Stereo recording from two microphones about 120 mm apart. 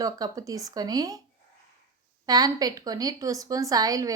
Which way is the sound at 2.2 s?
35° right (ahead or behind).